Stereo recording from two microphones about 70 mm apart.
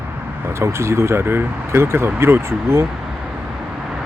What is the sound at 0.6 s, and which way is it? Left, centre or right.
Speech, right.